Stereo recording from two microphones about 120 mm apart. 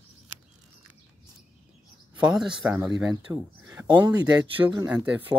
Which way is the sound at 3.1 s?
30° right (ahead or behind).